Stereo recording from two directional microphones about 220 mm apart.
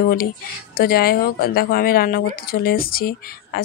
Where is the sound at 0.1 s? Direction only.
40° left (ahead or behind).